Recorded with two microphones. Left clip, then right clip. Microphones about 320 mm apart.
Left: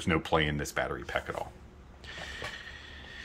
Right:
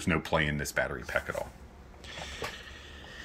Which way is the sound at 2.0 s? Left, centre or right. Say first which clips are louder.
Right 1 dB; centre.